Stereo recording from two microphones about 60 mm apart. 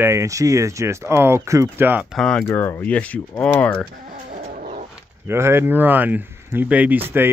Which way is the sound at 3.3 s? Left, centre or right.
Left.